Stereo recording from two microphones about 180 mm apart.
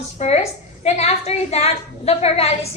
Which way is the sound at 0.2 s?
40° left (ahead or behind).